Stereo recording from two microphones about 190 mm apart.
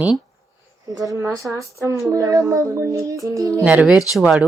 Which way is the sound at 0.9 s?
15° right (ahead or behind).